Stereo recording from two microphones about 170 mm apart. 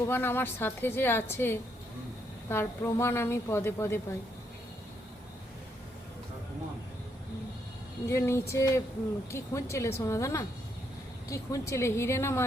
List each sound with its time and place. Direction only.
0.1 s a woman's voice: 10° left (ahead or behind)
8.0 s a woman's voice: 15° left (ahead or behind)